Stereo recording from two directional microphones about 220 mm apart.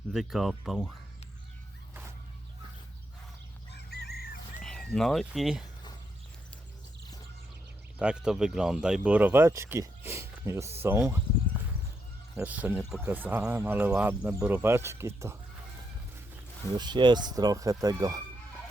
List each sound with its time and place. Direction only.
0.1 s speech: centre (ahead or behind)
3.7 s chicken: 50° left (ahead or behind)
4.6 s speech: centre (ahead or behind)
7.9 s speech: 5° right (ahead or behind)
12.4 s speech: 5° right (ahead or behind)
16.7 s speech: 20° right (ahead or behind)